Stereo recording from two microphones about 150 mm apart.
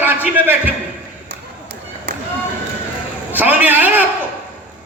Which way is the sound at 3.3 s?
10° right (ahead or behind).